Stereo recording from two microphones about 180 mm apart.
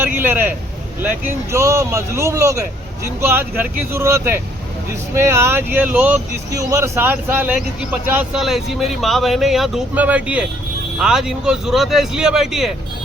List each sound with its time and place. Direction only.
0.0 s vehicle: 10° right (ahead or behind)
1.5 s speech: 15° right (ahead or behind)